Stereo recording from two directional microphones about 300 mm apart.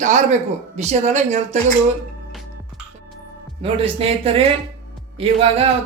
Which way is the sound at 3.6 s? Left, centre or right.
Centre.